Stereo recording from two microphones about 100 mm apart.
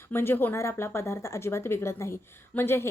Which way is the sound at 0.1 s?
25° left (ahead or behind).